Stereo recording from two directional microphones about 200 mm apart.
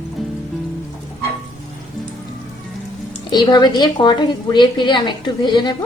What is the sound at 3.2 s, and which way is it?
A woman's voice, 20° left (ahead or behind).